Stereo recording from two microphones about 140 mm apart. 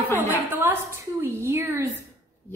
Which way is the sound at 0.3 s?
15° right (ahead or behind).